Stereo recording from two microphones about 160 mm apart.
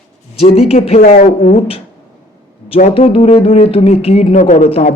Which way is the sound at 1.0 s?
55° left (ahead or behind).